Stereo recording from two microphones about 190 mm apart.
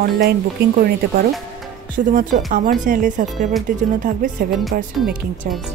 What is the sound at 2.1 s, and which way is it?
Speech, 45° right (ahead or behind).